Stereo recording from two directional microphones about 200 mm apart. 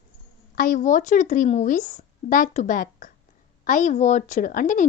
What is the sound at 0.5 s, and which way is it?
A woman's voice, 45° left (ahead or behind).